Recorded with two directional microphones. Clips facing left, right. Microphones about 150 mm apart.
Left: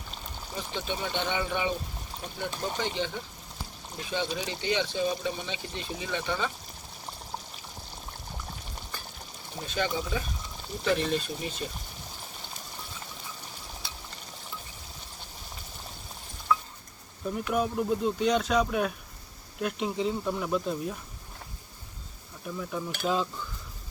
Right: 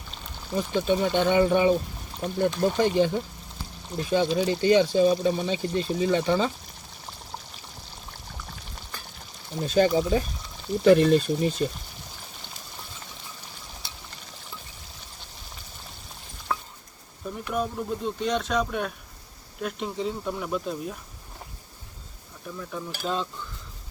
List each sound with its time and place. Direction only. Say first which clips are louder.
0.5 s speech: right 11 dB; 45° right (ahead or behind)
9.6 s speech: right 10 dB; 40° right (ahead or behind)
17.2 s speech: left 1 dB; centre (ahead or behind)
22.4 s speech: left 1 dB; 5° left (ahead or behind)